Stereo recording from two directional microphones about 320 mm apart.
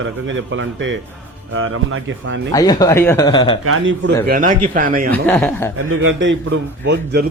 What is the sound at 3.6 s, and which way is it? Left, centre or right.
Speech, right.